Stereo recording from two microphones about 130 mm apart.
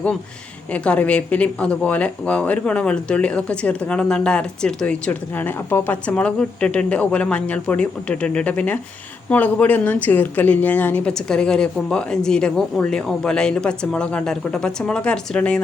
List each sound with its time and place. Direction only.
0.7 s speech: 10° left (ahead or behind)